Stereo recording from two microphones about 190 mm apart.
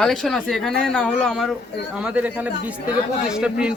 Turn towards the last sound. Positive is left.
turn(degrees=-5)  # may be behind; listen again after turning